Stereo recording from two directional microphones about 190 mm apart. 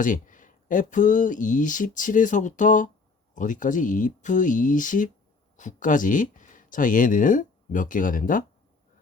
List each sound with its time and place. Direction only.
0.0 s speech: 45° left (ahead or behind)